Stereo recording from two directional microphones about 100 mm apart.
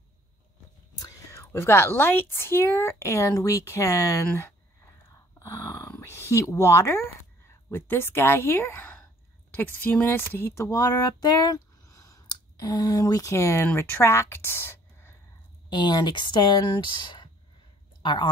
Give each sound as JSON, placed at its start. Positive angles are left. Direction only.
{"t": 0.9, "sound": "speech", "side_deg": 30}
{"t": 5.1, "sound": "speech", "side_deg": 30}
{"t": 15.7, "sound": "speech", "side_deg": 45}